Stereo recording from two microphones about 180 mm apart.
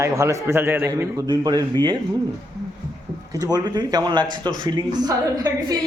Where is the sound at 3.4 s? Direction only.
20° right (ahead or behind).